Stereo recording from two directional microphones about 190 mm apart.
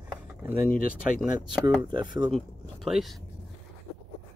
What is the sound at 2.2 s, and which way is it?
Speech, centre (ahead or behind).